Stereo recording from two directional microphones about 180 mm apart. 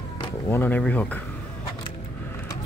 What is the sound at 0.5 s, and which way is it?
Speech, 10° left (ahead or behind).